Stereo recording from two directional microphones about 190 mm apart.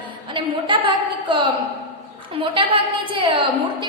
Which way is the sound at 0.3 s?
25° right (ahead or behind).